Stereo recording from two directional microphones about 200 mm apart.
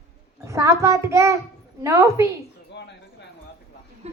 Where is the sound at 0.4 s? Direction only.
15° right (ahead or behind).